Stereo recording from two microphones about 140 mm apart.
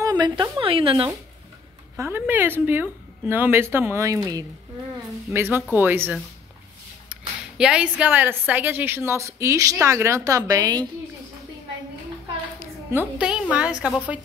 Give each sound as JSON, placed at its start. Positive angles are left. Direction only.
{"t": 0.0, "sound": "speech", "side_deg": -30}
{"t": 2.0, "sound": "a woman's voice", "side_deg": -15}
{"t": 12.5, "sound": "a woman's voice", "side_deg": -10}